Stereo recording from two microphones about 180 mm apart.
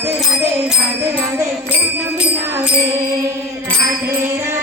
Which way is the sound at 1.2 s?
10° right (ahead or behind).